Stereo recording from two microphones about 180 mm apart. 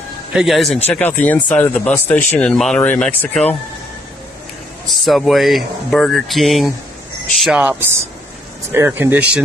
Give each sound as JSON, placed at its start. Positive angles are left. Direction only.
{"t": 0.3, "sound": "speech", "side_deg": 0}
{"t": 5.0, "sound": "speech", "side_deg": 0}
{"t": 8.7, "sound": "speech", "side_deg": -15}